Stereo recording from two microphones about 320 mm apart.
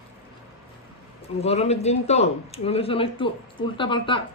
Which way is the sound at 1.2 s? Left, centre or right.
Centre.